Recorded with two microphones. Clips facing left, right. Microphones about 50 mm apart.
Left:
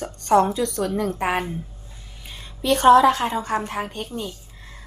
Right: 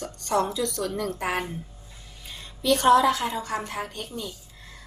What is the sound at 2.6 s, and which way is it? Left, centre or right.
A woman's voice, left.